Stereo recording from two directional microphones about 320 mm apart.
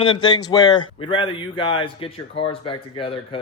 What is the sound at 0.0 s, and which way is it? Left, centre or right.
Speech, centre.